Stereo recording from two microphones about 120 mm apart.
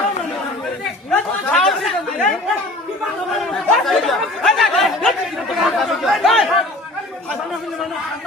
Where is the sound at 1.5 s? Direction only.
Centre (ahead or behind).